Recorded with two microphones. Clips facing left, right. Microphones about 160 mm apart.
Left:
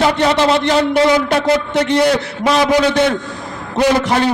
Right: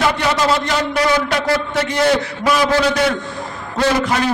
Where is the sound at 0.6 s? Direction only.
25° left (ahead or behind).